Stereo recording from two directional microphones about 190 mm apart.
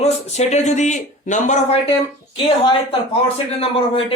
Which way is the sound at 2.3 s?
25° left (ahead or behind).